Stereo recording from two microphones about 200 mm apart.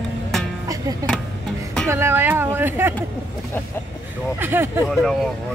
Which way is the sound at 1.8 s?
10° right (ahead or behind).